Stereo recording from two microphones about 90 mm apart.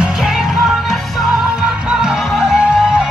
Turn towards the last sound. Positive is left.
turn(degrees=-5)  # may be behind; listen again after turning